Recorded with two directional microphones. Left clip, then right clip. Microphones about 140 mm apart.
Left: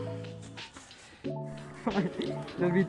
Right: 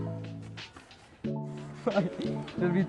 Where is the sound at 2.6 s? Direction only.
25° right (ahead or behind).